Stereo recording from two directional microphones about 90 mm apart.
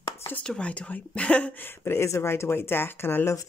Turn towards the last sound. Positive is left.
turn(degrees=25)  # may be behind; listen again after turning